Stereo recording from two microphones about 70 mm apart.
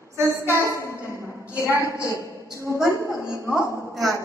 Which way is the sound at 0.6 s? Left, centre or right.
Left.